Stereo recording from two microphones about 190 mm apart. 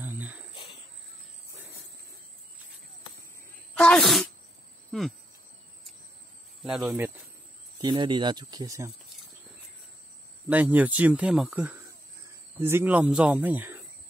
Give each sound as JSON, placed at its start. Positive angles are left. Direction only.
{"t": 0.0, "sound": "cricket", "side_deg": -10}
{"t": 3.7, "sound": "a sound", "side_deg": 5}
{"t": 6.6, "sound": "speech", "side_deg": 0}
{"t": 7.8, "sound": "speech", "side_deg": -25}
{"t": 10.5, "sound": "speech", "side_deg": -10}